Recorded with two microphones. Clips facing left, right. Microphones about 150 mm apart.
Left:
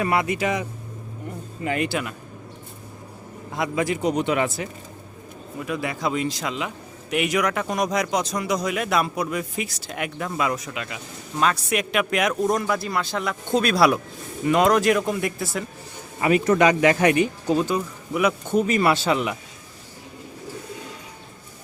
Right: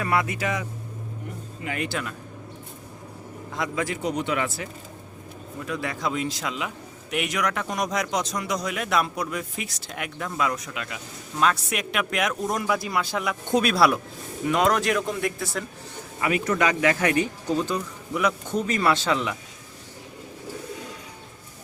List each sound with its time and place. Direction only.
0.0 s a man's voice: 20° left (ahead or behind)
1.8 s speech: 10° left (ahead or behind)
3.5 s a man's voice: 10° left (ahead or behind)
5.5 s speech: 10° left (ahead or behind)
16.2 s speech: 30° left (ahead or behind); by 19.4 s 10° left (ahead or behind)